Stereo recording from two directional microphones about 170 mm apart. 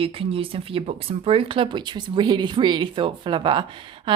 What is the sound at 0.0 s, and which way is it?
Speech, 35° right (ahead or behind).